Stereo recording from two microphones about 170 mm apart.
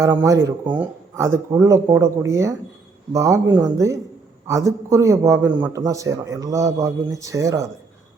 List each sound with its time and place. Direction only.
0.0 s speech: 20° right (ahead or behind)